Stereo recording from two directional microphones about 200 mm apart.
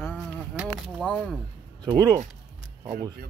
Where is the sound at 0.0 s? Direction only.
10° left (ahead or behind).